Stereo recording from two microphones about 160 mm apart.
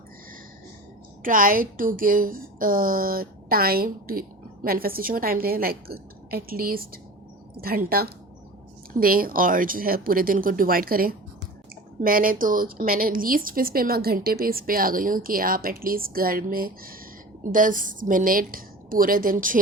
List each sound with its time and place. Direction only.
1.2 s a woman's voice: 60° right (ahead or behind)